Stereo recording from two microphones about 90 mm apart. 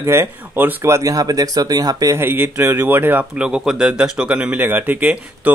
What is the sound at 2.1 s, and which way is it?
Speech, 25° right (ahead or behind).